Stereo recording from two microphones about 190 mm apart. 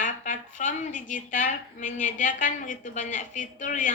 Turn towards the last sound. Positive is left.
turn(degrees=40)  # may be behind; listen again after turning